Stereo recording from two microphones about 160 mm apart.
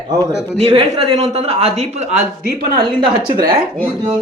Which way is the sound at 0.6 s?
35° right (ahead or behind).